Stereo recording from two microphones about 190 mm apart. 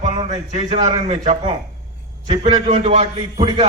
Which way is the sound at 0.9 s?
35° right (ahead or behind).